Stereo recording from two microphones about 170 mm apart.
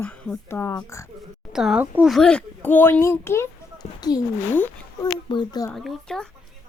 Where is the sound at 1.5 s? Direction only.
5° right (ahead or behind); by 4.2 s 25° left (ahead or behind).